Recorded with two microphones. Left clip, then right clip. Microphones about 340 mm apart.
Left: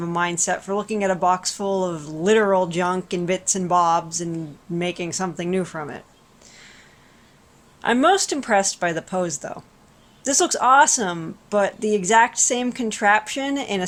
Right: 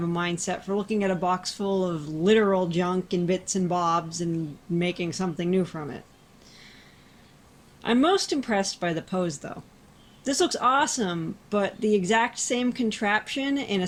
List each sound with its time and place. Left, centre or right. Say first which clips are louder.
0.1 s speech: left 10 dB; centre
7.8 s speech: left 5 dB; centre